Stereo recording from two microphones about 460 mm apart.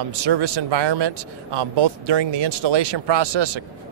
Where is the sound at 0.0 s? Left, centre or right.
Right.